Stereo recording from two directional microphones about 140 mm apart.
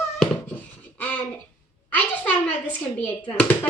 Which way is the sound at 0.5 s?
10° left (ahead or behind).